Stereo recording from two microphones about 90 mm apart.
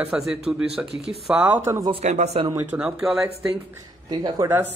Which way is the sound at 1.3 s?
20° right (ahead or behind).